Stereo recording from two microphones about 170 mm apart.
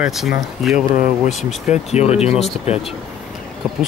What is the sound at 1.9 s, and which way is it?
Speech, 40° left (ahead or behind).